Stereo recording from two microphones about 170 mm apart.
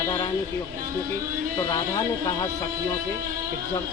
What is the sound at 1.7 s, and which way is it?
Speech, 20° left (ahead or behind).